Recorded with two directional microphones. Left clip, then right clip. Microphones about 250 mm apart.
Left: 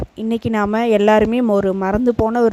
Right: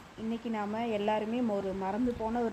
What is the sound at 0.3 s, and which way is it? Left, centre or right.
Speech, left.